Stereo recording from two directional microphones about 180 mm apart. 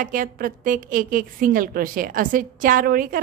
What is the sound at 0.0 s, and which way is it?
A woman's voice, 50° right (ahead or behind).